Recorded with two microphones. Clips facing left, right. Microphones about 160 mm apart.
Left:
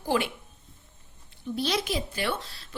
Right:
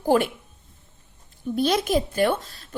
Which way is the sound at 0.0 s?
50° right (ahead or behind).